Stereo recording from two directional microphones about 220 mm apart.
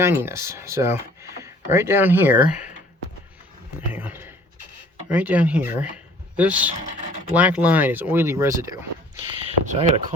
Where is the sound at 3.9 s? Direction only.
10° right (ahead or behind).